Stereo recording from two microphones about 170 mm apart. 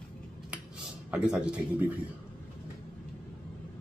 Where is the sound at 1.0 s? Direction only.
5° right (ahead or behind).